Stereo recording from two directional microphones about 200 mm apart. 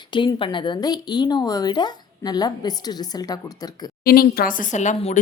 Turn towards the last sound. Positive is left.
turn(degrees=35)  # may be behind; listen again after turning